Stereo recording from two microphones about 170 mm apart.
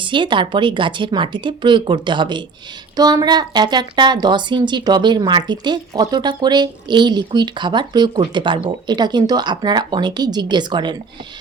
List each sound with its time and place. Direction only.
0.0 s a woman's voice: 30° right (ahead or behind)